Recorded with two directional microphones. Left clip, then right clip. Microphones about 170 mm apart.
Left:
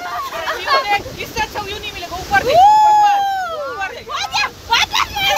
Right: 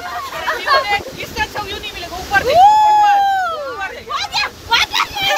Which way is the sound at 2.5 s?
15° left (ahead or behind).